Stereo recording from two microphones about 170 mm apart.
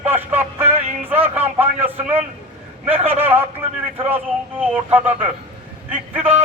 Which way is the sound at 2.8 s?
10° right (ahead or behind).